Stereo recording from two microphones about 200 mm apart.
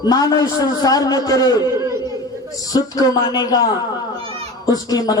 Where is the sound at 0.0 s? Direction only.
20° left (ahead or behind).